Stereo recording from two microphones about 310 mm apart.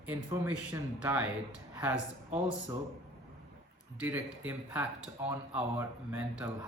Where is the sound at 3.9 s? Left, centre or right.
Centre.